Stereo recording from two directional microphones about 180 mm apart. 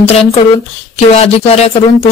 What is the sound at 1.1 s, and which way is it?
Speech, 35° left (ahead or behind).